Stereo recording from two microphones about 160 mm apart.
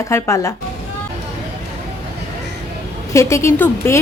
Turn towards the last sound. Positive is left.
turn(degrees=15)  # may be behind; listen again after turning